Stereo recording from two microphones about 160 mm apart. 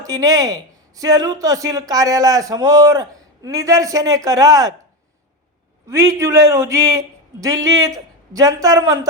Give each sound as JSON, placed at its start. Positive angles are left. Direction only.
{"t": 0.0, "sound": "speech", "side_deg": -20}
{"t": 5.9, "sound": "speech", "side_deg": -20}